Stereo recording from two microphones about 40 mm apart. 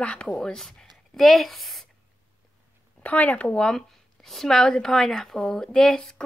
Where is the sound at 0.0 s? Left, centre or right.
Left; by 1.9 s centre.